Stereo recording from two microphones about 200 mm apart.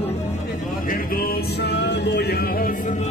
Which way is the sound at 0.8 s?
45° left (ahead or behind).